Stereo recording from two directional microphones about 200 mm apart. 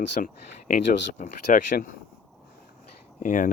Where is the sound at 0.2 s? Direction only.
40° left (ahead or behind).